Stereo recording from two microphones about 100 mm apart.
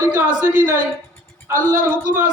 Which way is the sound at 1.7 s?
30° right (ahead or behind).